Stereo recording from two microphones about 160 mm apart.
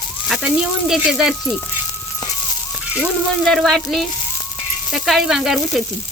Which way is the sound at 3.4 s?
Centre (ahead or behind).